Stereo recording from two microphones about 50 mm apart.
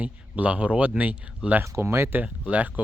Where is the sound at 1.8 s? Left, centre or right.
Right.